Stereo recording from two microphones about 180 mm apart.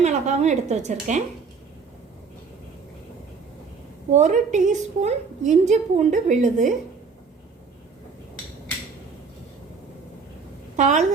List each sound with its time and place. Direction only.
0.0 s a woman's voice: 40° right (ahead or behind)
4.1 s a woman's voice: 40° right (ahead or behind)
10.8 s a woman's voice: 40° right (ahead or behind)